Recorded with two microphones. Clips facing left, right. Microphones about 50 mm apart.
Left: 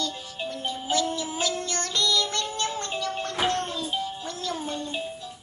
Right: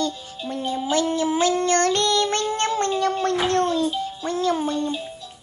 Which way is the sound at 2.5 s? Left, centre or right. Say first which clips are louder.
Right 8 dB; right.